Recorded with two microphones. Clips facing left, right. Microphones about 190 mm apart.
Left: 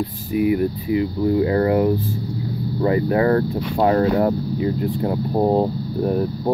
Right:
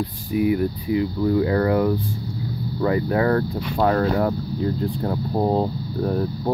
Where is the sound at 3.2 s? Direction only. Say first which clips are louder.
Left 3 dB; 25° left (ahead or behind).